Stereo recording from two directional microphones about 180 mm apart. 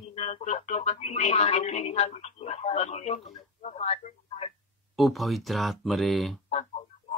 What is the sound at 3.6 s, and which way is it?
Telephone, 35° left (ahead or behind).